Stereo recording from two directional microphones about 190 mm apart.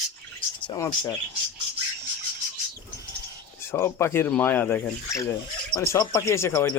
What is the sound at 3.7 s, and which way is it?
Speech, 15° left (ahead or behind).